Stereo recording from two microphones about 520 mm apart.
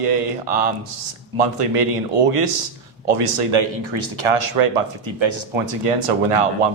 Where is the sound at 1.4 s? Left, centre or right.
Right.